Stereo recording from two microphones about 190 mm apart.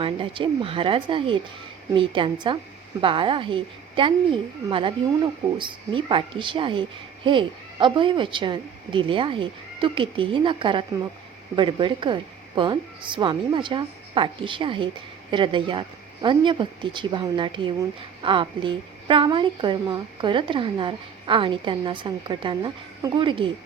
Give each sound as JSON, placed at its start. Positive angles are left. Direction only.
{"t": 0.0, "sound": "a woman's voice", "side_deg": -25}